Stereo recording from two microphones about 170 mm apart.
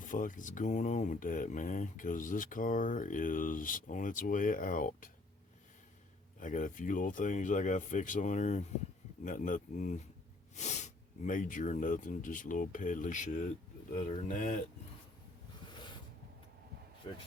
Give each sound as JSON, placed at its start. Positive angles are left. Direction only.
{"t": 0.0, "sound": "speech", "side_deg": 50}
{"t": 6.4, "sound": "speech", "side_deg": 50}